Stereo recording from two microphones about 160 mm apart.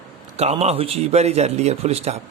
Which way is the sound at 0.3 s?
40° right (ahead or behind).